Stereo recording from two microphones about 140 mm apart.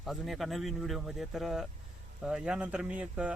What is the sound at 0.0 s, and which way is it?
Speech, centre (ahead or behind).